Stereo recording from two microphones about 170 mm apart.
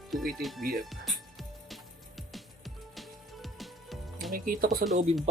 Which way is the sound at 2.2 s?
Centre (ahead or behind).